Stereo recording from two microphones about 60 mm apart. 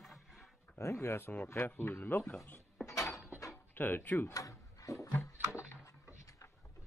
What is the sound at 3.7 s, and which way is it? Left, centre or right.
Speech, left.